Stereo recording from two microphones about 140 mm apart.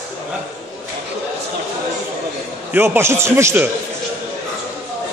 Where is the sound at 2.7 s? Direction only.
15° right (ahead or behind).